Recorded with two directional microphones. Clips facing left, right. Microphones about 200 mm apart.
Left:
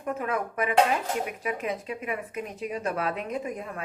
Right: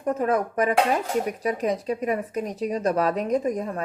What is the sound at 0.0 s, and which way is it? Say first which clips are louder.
A woman's voice: right 6 dB; 40° right (ahead or behind).